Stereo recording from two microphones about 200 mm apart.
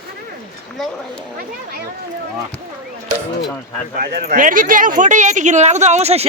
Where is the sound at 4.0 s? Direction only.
45° right (ahead or behind).